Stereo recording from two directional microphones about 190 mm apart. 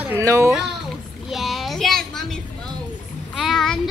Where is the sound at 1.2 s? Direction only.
Centre (ahead or behind).